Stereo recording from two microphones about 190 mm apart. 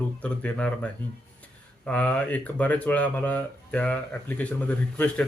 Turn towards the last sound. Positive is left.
turn(degrees=5)  # may be behind; listen again after turning